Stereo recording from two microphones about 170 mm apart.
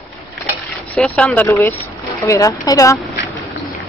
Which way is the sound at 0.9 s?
5° left (ahead or behind).